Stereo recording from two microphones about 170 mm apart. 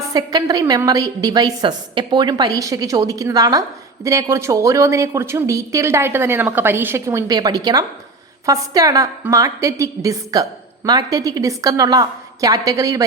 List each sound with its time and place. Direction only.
0.1 s a woman's voice: 25° right (ahead or behind)